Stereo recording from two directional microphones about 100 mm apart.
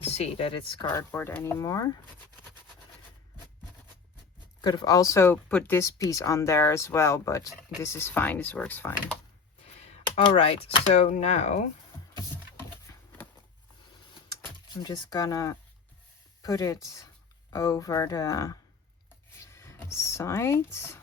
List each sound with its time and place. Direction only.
0.0 s speech: 90° left; by 0.9 s 65° left (ahead or behind)
0.9 s speech: 25° left (ahead or behind)
4.6 s speech: 45° left (ahead or behind); by 5.9 s 20° left (ahead or behind)
6.0 s speech: 35° left (ahead or behind)
10.2 s speech: 60° left (ahead or behind); by 11.3 s 90° left
14.8 s speech: 45° left (ahead or behind)
19.4 s a sound: 25° left (ahead or behind)